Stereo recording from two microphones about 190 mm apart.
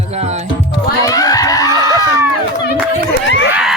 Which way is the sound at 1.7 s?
20° right (ahead or behind).